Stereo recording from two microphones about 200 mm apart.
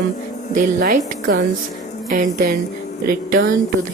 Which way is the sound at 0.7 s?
50° right (ahead or behind).